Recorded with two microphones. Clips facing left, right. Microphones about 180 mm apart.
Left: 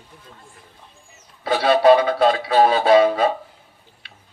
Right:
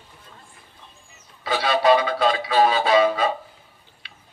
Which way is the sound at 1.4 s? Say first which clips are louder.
Left 5 dB; 55° left (ahead or behind).